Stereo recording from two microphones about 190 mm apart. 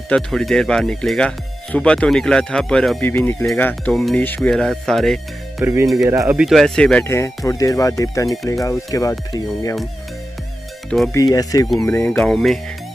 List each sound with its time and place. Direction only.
0.1 s speech: centre (ahead or behind)
5.6 s speech: 15° right (ahead or behind)
6.4 s speech: centre (ahead or behind); by 9.8 s 20° left (ahead or behind)
11.1 s speech: 20° left (ahead or behind)
12.2 s speech: centre (ahead or behind)